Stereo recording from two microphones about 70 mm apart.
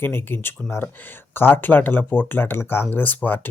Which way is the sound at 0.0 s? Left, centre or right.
Left.